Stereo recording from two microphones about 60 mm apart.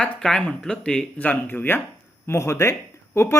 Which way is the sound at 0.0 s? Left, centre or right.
Centre.